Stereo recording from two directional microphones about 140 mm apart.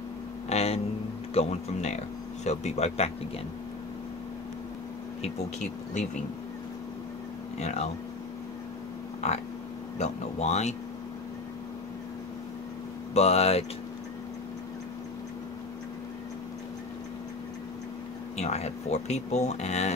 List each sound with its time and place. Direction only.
0.5 s a sound: 50° left (ahead or behind)
1.3 s speech: 50° left (ahead or behind)
5.2 s speech: 60° left (ahead or behind)
7.5 s speech: 50° left (ahead or behind)
9.9 s speech: 55° left (ahead or behind)
13.1 s speech: 50° left (ahead or behind)
18.4 s speech: 50° left (ahead or behind)